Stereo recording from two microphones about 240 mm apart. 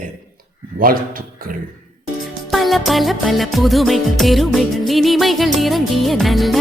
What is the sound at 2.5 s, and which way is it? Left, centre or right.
Music, centre.